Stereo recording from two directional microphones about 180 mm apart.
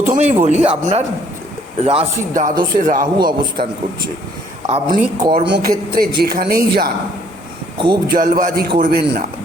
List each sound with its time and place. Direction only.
0.1 s speech: 40° right (ahead or behind)
2.3 s a man's voice: 50° right (ahead or behind)
4.7 s speech: 25° right (ahead or behind)
5.5 s speech: 70° right (ahead or behind)
6.0 s speech: 55° right (ahead or behind)
7.8 s speech: 25° right (ahead or behind)
8.1 s a man's voice: 50° right (ahead or behind)